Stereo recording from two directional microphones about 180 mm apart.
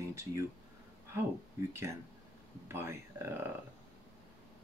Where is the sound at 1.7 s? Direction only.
15° right (ahead or behind).